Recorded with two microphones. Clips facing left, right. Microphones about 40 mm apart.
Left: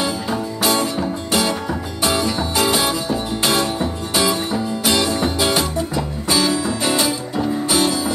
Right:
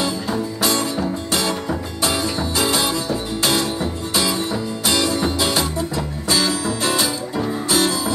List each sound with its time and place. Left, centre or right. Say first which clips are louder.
0.0 s music: even; centre
6.6 s music: left 1 dB; left
7.0 s music: left 2 dB; centre